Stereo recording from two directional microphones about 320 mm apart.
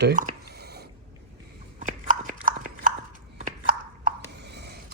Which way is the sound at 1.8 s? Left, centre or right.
Right.